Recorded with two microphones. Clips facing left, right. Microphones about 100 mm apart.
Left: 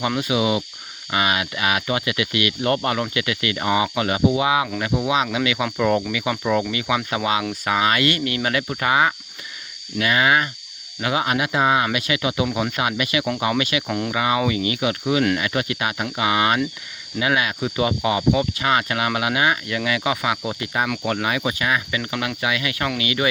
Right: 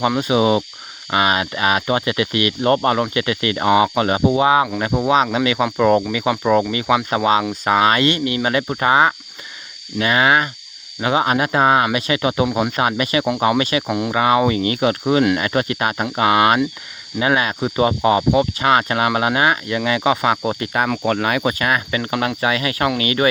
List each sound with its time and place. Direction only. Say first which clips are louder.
0.2 s speech: right 5 dB; 35° right (ahead or behind)
11.9 s speech: right 4 dB; 35° right (ahead or behind)
13.8 s speech: right 4 dB; 15° right (ahead or behind)
14.1 s speech: right 6 dB; 35° right (ahead or behind)